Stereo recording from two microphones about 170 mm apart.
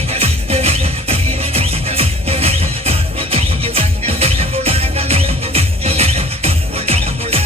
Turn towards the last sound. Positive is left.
turn(degrees=-35)  # may be behind; listen again after turning